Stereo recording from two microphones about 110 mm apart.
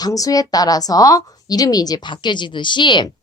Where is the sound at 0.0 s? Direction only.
35° left (ahead or behind).